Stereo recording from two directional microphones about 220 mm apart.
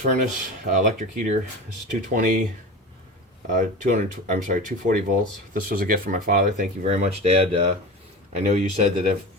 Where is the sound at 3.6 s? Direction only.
35° right (ahead or behind).